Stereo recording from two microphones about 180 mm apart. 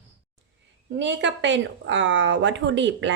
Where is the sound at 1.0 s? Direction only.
85° right.